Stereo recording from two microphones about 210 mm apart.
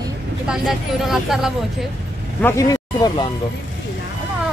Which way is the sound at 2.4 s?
10° left (ahead or behind).